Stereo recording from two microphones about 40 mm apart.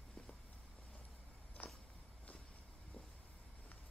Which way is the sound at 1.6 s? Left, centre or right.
Left.